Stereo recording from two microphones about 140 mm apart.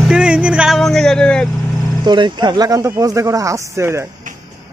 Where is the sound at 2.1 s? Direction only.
35° right (ahead or behind).